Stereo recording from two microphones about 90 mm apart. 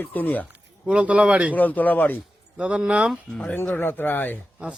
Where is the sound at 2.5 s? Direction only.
10° right (ahead or behind).